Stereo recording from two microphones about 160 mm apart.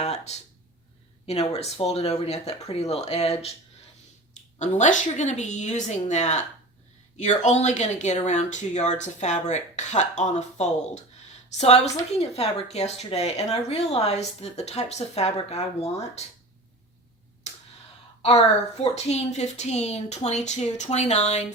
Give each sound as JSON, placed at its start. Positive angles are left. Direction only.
{"t": 0.0, "sound": "a sound", "side_deg": 40}
{"t": 1.3, "sound": "speech", "side_deg": 40}
{"t": 4.5, "sound": "speech", "side_deg": 45}
{"t": 18.2, "sound": "speech", "side_deg": 40}